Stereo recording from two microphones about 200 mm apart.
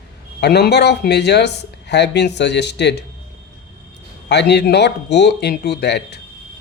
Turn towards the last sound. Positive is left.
turn(degrees=55)  # may be behind; listen again after turning